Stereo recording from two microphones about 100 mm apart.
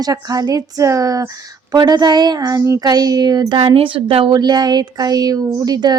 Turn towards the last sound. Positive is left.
turn(degrees=-40)  # may be behind; listen again after turning